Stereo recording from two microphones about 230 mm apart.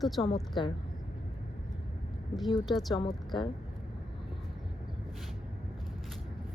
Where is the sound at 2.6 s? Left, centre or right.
Centre.